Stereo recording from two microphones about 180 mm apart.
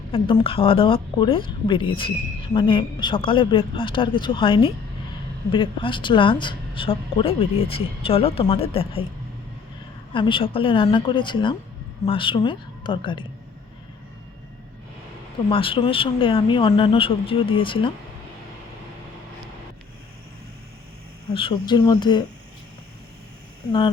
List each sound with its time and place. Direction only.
0.1 s a woman's voice: 30° left (ahead or behind)
10.2 s a woman's voice: 30° left (ahead or behind)
15.4 s a woman's voice: 30° left (ahead or behind)
21.3 s a woman's voice: 25° left (ahead or behind)